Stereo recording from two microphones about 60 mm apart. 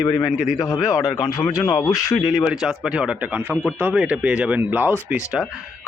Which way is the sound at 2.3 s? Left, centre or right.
Centre.